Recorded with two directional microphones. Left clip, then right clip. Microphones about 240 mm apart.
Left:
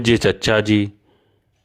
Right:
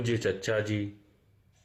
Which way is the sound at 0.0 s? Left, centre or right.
Left.